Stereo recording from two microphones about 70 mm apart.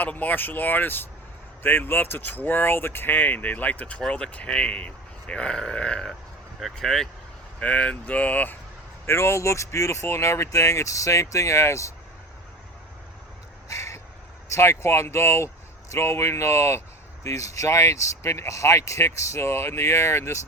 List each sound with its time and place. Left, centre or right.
0.0 s speech: left; by 7.1 s centre
7.6 s speech: centre
9.0 s speech: left
13.7 s crow: left
14.5 s speech: left